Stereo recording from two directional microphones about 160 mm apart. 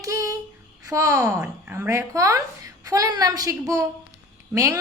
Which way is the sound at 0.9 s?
20° right (ahead or behind).